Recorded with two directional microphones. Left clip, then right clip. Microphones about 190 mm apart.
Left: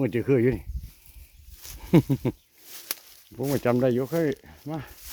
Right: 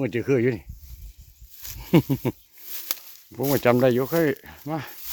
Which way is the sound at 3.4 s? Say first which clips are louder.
Right 4 dB; 25° right (ahead or behind).